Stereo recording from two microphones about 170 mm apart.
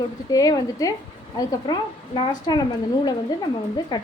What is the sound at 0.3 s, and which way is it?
A woman's voice, 20° left (ahead or behind).